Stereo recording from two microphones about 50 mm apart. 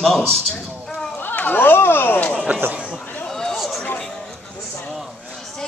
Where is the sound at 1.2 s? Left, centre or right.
Left.